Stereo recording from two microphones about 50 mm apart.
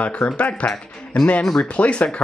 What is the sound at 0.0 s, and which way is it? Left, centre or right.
Speech, left.